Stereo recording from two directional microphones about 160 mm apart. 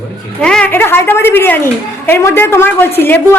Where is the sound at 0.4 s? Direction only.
5° left (ahead or behind).